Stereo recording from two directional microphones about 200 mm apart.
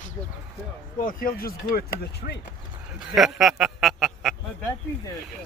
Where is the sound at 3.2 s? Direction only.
Centre (ahead or behind).